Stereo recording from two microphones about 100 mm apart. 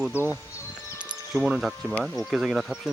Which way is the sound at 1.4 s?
5° right (ahead or behind).